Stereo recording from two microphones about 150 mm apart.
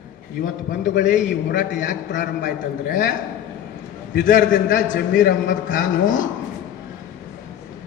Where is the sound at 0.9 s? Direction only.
75° left (ahead or behind).